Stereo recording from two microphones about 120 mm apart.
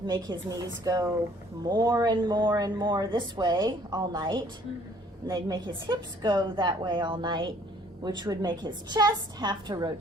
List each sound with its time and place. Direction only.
0.1 s speech: 35° right (ahead or behind)